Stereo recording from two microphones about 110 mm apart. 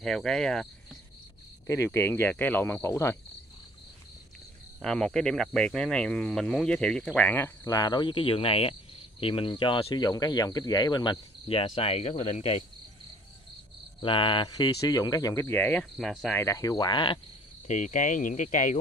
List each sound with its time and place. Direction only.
0.0 s speech: 5° left (ahead or behind)
1.9 s speech: 20° left (ahead or behind)
4.8 s speech: 5° left (ahead or behind)
7.2 s speech: 20° left (ahead or behind)
7.6 s speech: 35° left (ahead or behind); by 9.9 s 55° left (ahead or behind)
9.9 s speech: 40° left (ahead or behind)
11.4 s cricket: 60° left (ahead or behind)
14.0 s speech: 50° left (ahead or behind); by 15.5 s 30° left (ahead or behind)
15.5 s speech: 15° left (ahead or behind)
15.8 s speech: 5° left (ahead or behind)
16.3 s speech: 30° left (ahead or behind); by 17.2 s 45° left (ahead or behind)
17.6 s cricket: 90° left
18.4 s speech: 90° left